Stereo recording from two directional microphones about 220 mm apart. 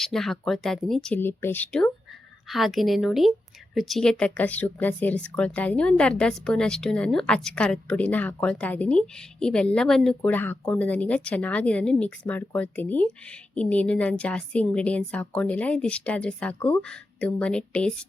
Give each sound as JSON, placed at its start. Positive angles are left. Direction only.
{"t": 0.0, "sound": "speech", "side_deg": 0}